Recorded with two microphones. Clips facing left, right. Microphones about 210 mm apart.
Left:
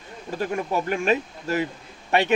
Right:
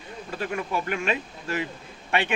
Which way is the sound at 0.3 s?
40° left (ahead or behind).